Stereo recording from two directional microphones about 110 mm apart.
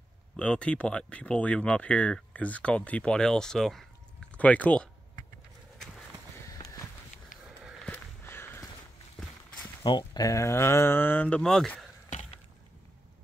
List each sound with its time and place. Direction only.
0.4 s speech: 10° left (ahead or behind)
7.9 s a sound: 20° left (ahead or behind)
9.8 s speech: 40° left (ahead or behind); by 11.9 s 10° left (ahead or behind)